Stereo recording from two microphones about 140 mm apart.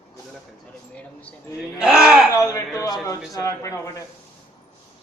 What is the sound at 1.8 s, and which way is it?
Speech, 5° right (ahead or behind).